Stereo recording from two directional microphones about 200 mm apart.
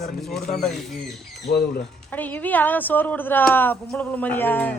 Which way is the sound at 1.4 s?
55° left (ahead or behind).